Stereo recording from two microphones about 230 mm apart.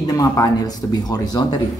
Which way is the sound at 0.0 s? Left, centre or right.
Centre.